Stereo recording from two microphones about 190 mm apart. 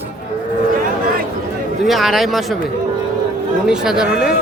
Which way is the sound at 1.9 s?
Centre (ahead or behind).